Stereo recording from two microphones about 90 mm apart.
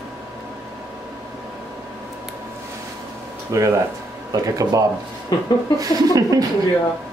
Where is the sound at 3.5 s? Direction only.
35° right (ahead or behind).